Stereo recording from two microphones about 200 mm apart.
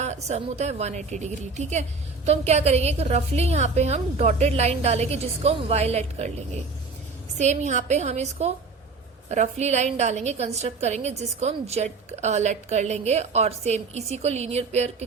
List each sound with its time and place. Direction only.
0.0 s a woman's voice: 35° right (ahead or behind)